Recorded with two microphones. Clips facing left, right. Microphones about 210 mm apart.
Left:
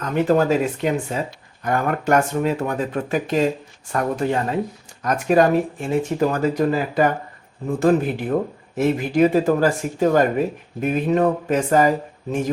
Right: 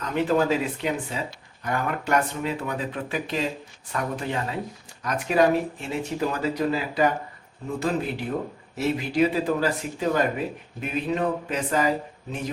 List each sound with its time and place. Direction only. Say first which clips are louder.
0.0 s speech: left 5 dB; 45° left (ahead or behind)